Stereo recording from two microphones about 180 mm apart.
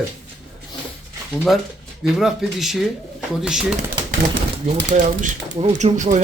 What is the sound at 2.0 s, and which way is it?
Speech, centre (ahead or behind).